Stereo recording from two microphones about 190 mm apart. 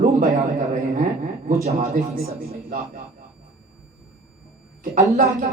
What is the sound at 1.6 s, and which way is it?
Speech, 35° right (ahead or behind).